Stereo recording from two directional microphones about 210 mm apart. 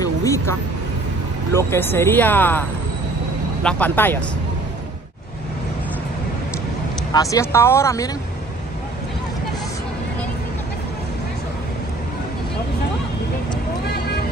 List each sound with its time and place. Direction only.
0.2 s music: 15° left (ahead or behind)
1.5 s speech: 10° left (ahead or behind)
3.6 s speech: 5° left (ahead or behind)
7.1 s speech: 15° left (ahead or behind)